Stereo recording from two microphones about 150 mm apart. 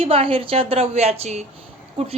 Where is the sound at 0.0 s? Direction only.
40° right (ahead or behind).